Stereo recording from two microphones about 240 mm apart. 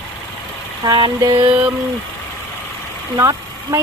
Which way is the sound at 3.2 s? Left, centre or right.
Centre.